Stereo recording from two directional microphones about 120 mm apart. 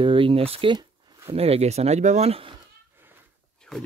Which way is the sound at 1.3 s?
55° right (ahead or behind).